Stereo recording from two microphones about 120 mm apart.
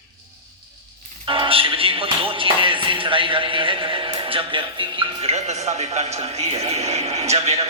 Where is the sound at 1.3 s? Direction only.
50° right (ahead or behind).